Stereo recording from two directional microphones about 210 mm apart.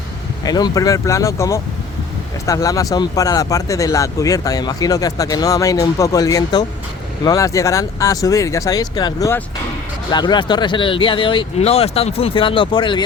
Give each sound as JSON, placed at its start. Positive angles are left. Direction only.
{"t": 0.4, "sound": "speech", "side_deg": 20}